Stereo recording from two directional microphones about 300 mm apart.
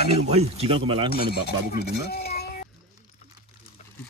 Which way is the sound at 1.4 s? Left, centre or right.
Left.